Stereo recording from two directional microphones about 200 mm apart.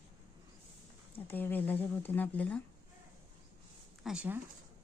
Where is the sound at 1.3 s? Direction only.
10° left (ahead or behind).